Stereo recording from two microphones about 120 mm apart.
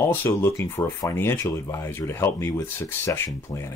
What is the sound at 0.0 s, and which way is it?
Speech, 20° left (ahead or behind).